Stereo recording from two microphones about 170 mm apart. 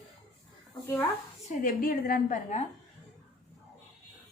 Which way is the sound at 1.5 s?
55° left (ahead or behind).